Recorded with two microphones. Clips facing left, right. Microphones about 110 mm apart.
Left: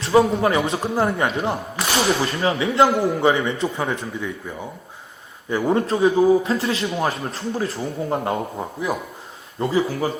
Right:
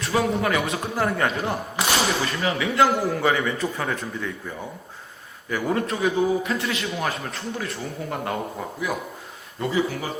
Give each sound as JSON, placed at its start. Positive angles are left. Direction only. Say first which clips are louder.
{"t": 0.0, "sound": "a man's voice", "louder": "left 6 dB", "side_deg": 30}
{"t": 5.5, "sound": "a man's voice", "louder": "left 5 dB", "side_deg": 25}